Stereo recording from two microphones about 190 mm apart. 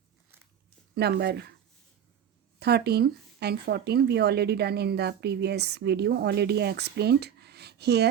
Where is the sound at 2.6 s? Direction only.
60° right (ahead or behind).